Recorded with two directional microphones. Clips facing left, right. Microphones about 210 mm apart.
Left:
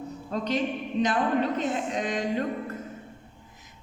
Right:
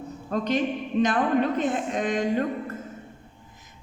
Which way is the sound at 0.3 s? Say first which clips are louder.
Right 3 dB; 50° right (ahead or behind).